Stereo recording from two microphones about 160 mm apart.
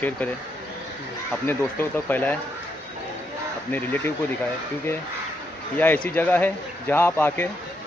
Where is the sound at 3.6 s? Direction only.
10° left (ahead or behind).